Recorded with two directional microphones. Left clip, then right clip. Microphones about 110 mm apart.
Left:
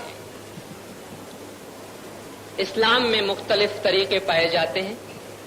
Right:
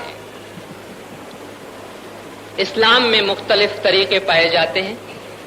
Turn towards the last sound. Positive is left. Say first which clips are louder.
# right 6 dB
turn(degrees=-45)  # may be behind; listen again after turning